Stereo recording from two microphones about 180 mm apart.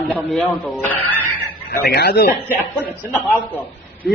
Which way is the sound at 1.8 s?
60° left (ahead or behind).